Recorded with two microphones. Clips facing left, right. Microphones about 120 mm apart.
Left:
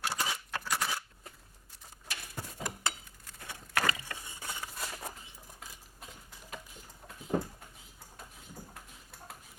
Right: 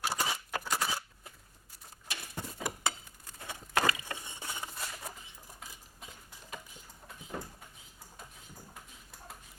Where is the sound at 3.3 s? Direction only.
25° right (ahead or behind).